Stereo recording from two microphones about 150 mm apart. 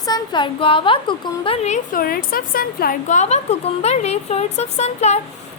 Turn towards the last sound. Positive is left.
turn(degrees=50)  # may be behind; listen again after turning